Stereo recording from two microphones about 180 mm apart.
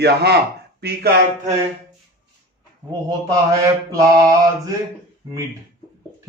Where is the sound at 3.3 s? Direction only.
20° right (ahead or behind).